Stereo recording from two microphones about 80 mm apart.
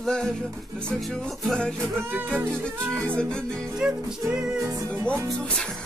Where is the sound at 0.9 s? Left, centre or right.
Centre.